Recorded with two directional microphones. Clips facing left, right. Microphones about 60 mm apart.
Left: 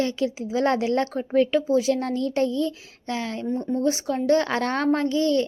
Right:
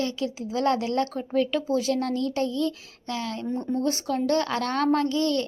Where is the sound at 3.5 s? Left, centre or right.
Centre.